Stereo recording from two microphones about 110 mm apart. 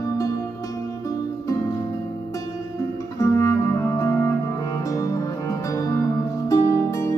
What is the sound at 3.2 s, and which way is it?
Music, 25° left (ahead or behind).